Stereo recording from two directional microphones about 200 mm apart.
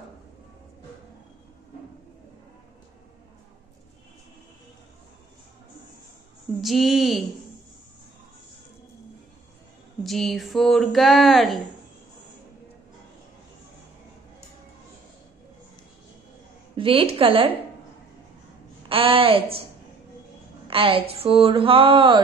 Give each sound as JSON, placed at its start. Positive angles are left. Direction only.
{"t": 6.6, "sound": "speech", "side_deg": 0}
{"t": 10.0, "sound": "speech", "side_deg": 0}
{"t": 16.7, "sound": "speech", "side_deg": -25}
{"t": 18.9, "sound": "a woman's voice", "side_deg": -25}
{"t": 20.6, "sound": "speech", "side_deg": -25}